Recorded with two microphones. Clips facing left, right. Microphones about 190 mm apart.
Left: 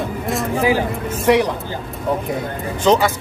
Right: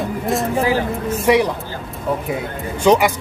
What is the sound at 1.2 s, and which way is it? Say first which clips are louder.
Speech: even; 10° right (ahead or behind).